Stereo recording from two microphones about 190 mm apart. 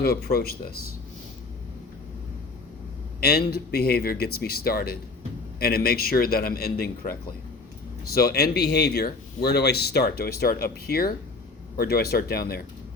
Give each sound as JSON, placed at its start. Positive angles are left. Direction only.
{"t": 0.0, "sound": "speech", "side_deg": 55}
{"t": 3.2, "sound": "speech", "side_deg": 55}